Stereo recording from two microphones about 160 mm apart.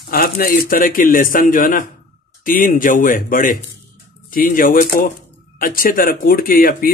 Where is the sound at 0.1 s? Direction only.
65° left (ahead or behind).